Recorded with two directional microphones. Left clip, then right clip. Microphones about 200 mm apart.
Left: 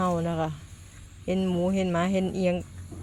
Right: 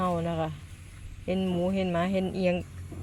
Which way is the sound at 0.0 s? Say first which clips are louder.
Left 2 dB; 20° left (ahead or behind).